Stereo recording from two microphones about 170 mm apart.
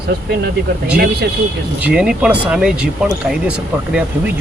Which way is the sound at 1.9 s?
5° right (ahead or behind).